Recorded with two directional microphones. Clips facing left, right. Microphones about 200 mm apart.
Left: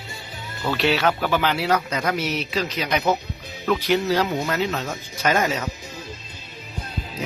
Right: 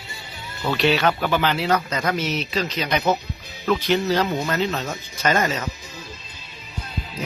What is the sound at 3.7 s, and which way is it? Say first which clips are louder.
Speech: even; 10° left (ahead or behind).